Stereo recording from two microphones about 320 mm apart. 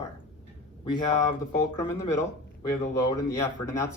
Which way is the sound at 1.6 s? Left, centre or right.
Centre.